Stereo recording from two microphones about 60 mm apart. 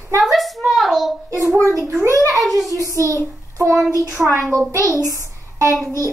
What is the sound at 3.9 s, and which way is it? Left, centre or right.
Speech, right.